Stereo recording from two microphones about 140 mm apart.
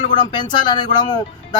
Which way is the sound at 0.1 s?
35° left (ahead or behind).